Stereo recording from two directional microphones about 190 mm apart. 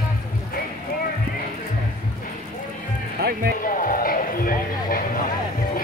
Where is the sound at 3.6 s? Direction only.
45° left (ahead or behind).